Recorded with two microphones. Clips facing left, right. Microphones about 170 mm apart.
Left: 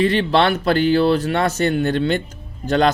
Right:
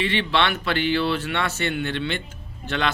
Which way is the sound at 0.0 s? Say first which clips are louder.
Left 7 dB; 40° left (ahead or behind).